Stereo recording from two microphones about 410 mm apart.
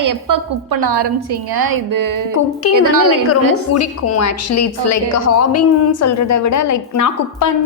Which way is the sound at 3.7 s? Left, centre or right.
Left.